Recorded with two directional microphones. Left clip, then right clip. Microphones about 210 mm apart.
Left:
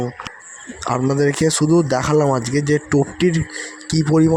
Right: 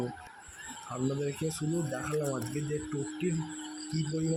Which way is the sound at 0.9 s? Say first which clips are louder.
Left 16 dB; 40° left (ahead or behind).